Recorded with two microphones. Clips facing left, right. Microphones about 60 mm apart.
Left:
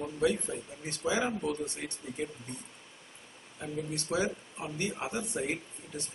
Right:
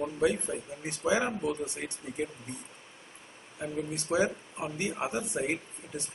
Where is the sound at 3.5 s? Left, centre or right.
Centre.